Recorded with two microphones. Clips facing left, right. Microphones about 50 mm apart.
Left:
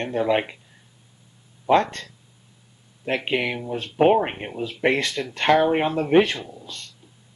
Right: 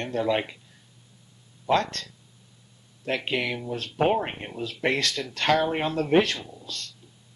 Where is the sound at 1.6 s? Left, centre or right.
Centre.